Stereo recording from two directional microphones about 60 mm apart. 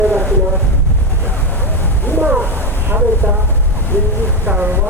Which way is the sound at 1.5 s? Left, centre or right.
Left.